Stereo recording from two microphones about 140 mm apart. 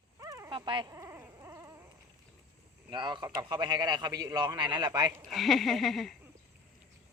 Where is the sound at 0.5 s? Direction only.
35° right (ahead or behind).